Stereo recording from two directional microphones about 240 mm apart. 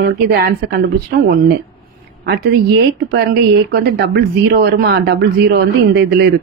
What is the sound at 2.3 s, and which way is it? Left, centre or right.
Speech, right.